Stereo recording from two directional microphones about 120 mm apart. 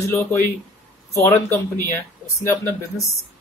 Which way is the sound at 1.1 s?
25° left (ahead or behind).